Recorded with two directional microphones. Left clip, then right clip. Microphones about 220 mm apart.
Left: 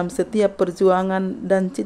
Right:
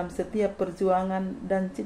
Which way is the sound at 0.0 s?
55° left (ahead or behind).